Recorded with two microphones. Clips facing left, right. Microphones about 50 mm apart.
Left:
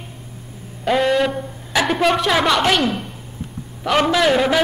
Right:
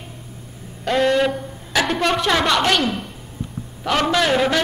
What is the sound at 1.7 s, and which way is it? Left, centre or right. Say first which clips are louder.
A woman's voice: left 2 dB; centre.